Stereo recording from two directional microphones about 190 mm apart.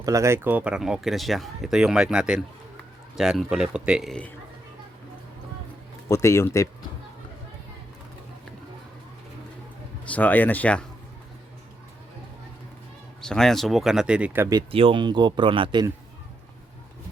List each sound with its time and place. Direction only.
0.0 s speech: 15° right (ahead or behind); by 4.3 s centre (ahead or behind)
6.1 s speech: 15° left (ahead or behind)
10.1 s speech: 10° left (ahead or behind)
13.2 s speech: 5° left (ahead or behind)
14.7 s speech: 30° right (ahead or behind)